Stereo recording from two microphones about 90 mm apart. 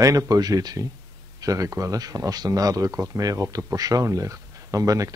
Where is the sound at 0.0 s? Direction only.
40° right (ahead or behind).